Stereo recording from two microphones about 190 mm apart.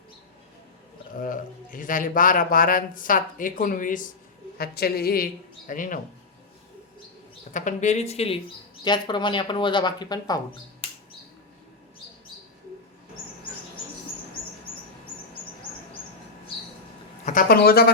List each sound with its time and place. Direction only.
1.2 s speech: 45° left (ahead or behind)
7.5 s speech: 40° left (ahead or behind); by 10.4 s 20° left (ahead or behind)
17.2 s speech: 50° left (ahead or behind)